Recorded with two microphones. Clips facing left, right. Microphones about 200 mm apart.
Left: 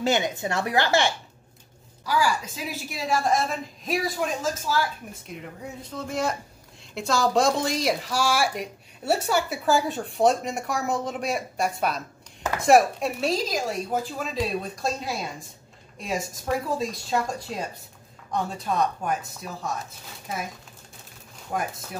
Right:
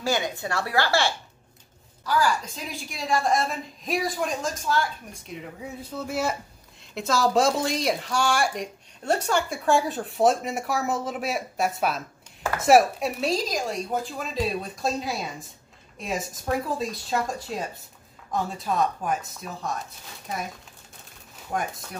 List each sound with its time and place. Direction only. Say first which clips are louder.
0.0 s a woman's voice: left 2 dB; 20° left (ahead or behind); by 20.4 s centre (ahead or behind)
21.5 s speech: even; centre (ahead or behind)